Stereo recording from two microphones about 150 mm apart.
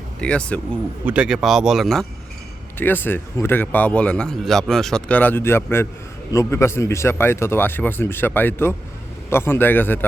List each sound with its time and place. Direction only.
0.2 s speech: 10° left (ahead or behind)
1.0 s speech: 5° right (ahead or behind)
2.7 s speech: 15° left (ahead or behind)